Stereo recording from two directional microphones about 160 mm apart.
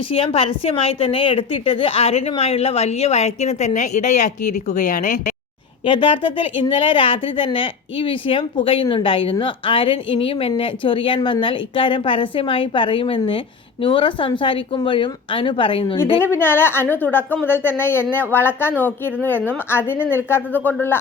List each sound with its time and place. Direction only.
0.1 s speech: 35° left (ahead or behind); by 5.3 s 55° left (ahead or behind)
5.8 s speech: 30° left (ahead or behind)
16.2 s speech: 15° left (ahead or behind)